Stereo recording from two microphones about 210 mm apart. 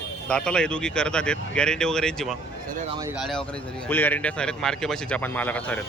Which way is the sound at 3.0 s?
10° right (ahead or behind).